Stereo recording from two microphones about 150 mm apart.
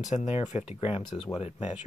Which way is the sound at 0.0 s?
50° left (ahead or behind).